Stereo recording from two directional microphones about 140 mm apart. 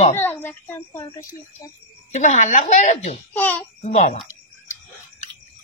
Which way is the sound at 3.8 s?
60° left (ahead or behind).